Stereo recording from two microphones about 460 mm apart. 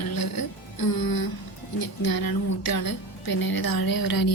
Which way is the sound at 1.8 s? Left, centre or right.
Left.